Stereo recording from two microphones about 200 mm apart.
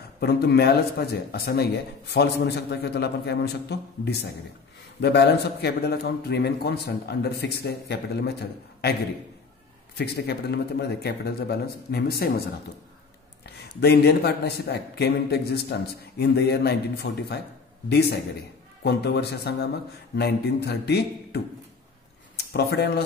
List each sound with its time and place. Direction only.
0.2 s a man's voice: 55° left (ahead or behind)
9.9 s a man's voice: 55° left (ahead or behind)
13.7 s a man's voice: 55° left (ahead or behind)
22.5 s a man's voice: 55° left (ahead or behind)